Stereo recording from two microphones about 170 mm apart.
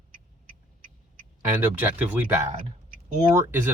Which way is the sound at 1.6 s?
10° right (ahead or behind).